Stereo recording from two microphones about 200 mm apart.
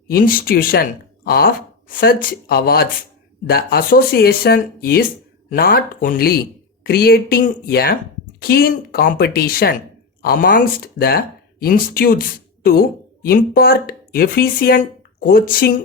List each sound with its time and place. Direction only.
0.1 s speech: 45° left (ahead or behind)